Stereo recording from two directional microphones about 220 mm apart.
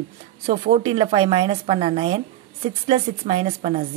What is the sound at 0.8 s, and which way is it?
A woman's voice, 25° right (ahead or behind).